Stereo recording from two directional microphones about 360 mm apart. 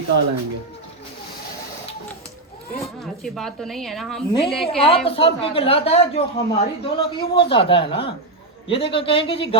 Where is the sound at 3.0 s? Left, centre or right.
Centre.